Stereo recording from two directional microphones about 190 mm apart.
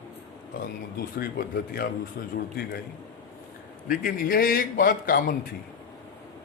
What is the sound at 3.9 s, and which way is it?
A man's voice, 50° left (ahead or behind).